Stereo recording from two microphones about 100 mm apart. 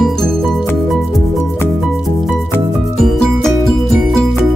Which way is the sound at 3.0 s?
Centre (ahead or behind).